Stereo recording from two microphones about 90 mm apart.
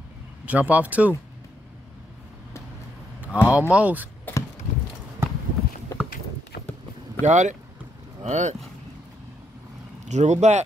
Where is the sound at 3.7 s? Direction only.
15° right (ahead or behind).